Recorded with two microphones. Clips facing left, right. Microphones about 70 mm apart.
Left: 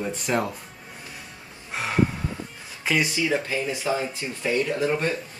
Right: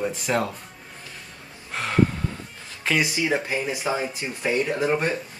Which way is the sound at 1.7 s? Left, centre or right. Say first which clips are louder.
Even; centre.